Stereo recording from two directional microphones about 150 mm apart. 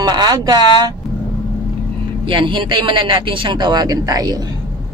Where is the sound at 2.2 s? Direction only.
35° right (ahead or behind).